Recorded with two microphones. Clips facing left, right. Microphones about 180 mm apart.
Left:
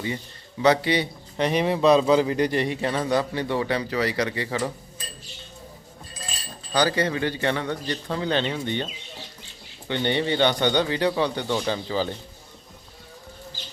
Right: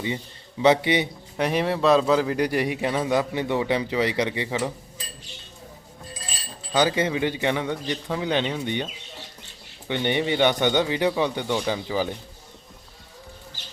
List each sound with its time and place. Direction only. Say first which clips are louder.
0.6 s speech: right 1 dB; 20° right (ahead or behind)
1.4 s a man's voice: left 1 dB; 5° right (ahead or behind)
4.4 s a man's voice: even; 5° right (ahead or behind)
6.7 s a man's voice: right 1 dB; 20° right (ahead or behind)
9.9 s a man's voice: even; 15° right (ahead or behind)